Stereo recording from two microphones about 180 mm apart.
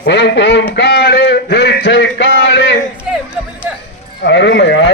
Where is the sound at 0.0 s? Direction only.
70° left (ahead or behind).